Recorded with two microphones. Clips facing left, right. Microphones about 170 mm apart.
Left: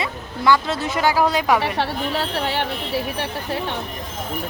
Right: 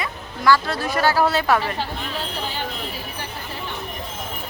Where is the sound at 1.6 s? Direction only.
70° left (ahead or behind).